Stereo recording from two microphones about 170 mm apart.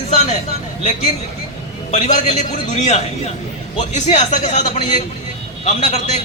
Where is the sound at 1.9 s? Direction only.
40° left (ahead or behind).